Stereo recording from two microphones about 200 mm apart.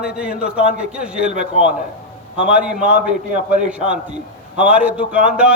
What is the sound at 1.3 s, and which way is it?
Speech, 40° right (ahead or behind).